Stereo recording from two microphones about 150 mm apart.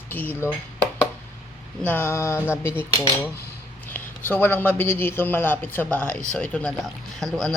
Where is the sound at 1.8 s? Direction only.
10° left (ahead or behind).